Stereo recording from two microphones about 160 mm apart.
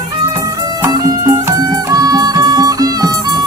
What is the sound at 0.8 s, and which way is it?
Music, 20° right (ahead or behind).